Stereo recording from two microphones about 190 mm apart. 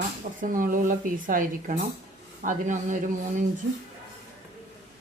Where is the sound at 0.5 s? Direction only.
45° right (ahead or behind).